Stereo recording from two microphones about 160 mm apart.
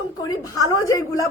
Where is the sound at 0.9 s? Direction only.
20° left (ahead or behind).